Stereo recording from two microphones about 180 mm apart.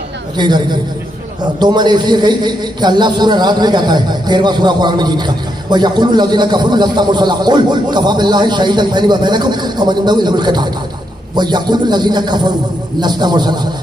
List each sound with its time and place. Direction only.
0.4 s a man's voice: 25° right (ahead or behind)